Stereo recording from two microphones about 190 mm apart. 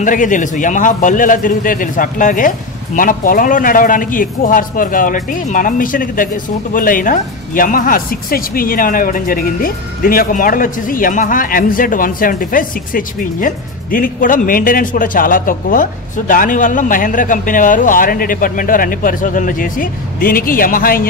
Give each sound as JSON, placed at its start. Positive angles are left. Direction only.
{"t": 0.0, "sound": "a man's voice", "side_deg": 45}